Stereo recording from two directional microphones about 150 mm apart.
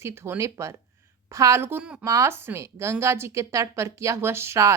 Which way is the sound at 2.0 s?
20° right (ahead or behind).